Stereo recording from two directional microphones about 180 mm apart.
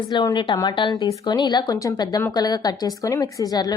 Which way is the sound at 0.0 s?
25° left (ahead or behind).